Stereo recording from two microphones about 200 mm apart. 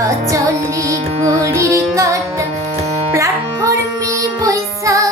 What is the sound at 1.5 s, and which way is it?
Music, 15° right (ahead or behind).